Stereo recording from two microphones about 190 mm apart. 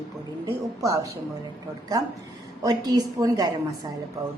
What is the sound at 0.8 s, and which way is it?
Speech, 20° right (ahead or behind).